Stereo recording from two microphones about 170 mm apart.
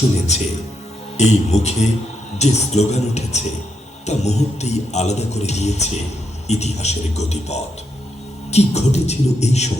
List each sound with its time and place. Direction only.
0.3 s speech: 40° left (ahead or behind)